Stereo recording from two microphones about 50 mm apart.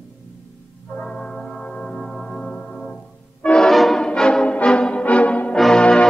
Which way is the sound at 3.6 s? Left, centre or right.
Centre.